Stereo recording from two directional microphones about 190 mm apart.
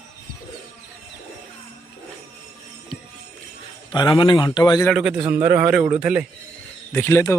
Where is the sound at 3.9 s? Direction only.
25° left (ahead or behind).